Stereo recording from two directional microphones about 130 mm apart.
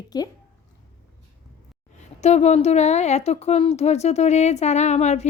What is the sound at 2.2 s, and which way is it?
A woman's voice, 60° left (ahead or behind).